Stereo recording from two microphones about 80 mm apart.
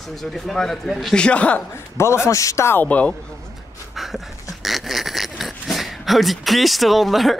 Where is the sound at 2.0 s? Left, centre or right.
Left.